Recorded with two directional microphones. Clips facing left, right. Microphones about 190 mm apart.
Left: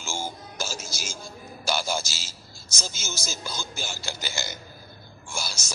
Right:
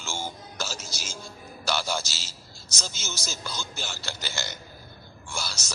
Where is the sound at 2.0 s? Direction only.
50° left (ahead or behind).